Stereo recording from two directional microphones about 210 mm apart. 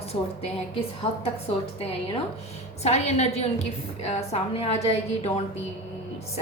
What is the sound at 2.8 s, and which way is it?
A woman's voice, 30° left (ahead or behind).